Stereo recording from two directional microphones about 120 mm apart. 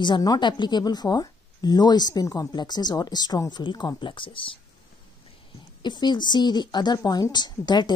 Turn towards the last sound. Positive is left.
turn(degrees=35)  # may be behind; listen again after turning